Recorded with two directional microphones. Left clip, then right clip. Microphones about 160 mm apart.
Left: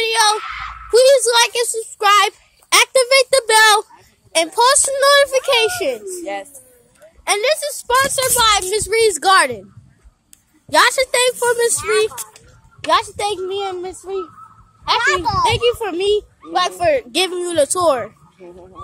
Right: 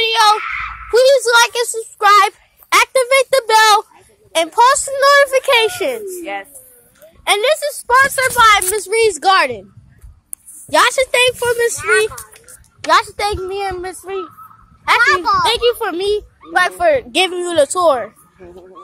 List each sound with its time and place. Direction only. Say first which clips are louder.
0.0 s a sound: right 3 dB; centre (ahead or behind)
4.3 s speech: right 2 dB; 10° left (ahead or behind); by 6.1 s 10° right (ahead or behind)
6.2 s speech: right 1 dB; 5° left (ahead or behind)
7.2 s a child's voice: right 3 dB; 5° right (ahead or behind)
8.4 s a child's voice: right 5 dB; 15° left (ahead or behind)
10.7 s speech: right 1 dB; 10° right (ahead or behind)
11.3 s speech: right 1 dB; 5° left (ahead or behind)
11.7 s speech: right 3 dB; 25° right (ahead or behind)
12.9 s a child's voice: right 3 dB; centre (ahead or behind)
17.7 s speech: right 2 dB; 15° left (ahead or behind)